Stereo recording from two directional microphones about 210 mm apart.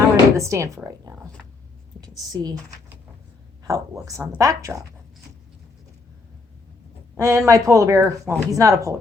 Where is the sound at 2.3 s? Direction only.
20° right (ahead or behind).